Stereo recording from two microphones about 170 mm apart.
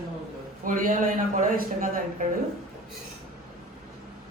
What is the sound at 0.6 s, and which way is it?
A woman's voice, 55° right (ahead or behind).